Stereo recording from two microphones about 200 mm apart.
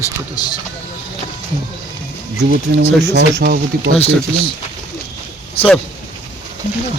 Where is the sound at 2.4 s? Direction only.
65° right (ahead or behind).